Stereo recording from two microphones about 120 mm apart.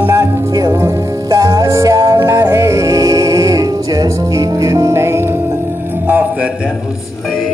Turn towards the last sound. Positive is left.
turn(degrees=-15)  # may be behind; listen again after turning